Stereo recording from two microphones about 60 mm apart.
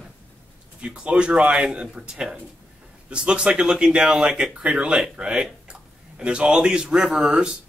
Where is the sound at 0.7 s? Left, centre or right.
Centre.